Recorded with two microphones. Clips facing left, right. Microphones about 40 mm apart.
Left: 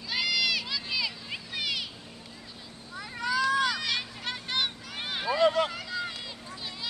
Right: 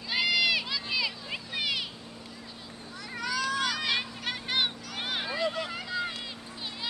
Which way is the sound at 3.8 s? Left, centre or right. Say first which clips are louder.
Right 2 dB; centre.